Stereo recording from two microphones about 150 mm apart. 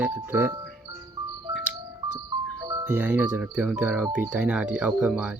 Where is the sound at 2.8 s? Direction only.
10° right (ahead or behind).